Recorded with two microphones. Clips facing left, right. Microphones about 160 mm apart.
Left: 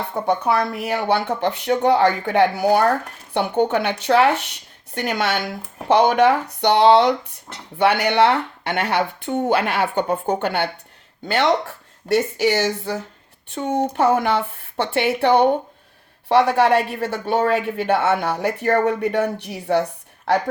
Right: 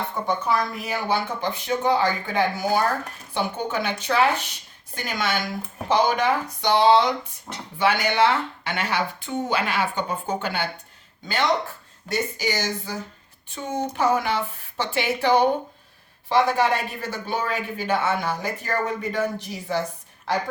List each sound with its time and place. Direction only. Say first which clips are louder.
0.1 s speech: left 6 dB; 70° left (ahead or behind)